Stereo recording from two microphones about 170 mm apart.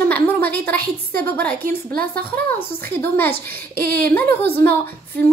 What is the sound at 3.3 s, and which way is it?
Speech, 65° right (ahead or behind).